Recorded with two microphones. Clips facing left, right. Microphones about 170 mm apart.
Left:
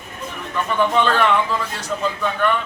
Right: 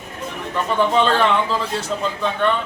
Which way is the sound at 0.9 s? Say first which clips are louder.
Even; 25° right (ahead or behind).